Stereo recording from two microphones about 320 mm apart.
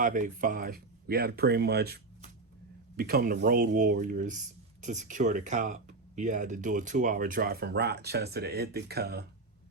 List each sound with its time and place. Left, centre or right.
0.0 s speech: right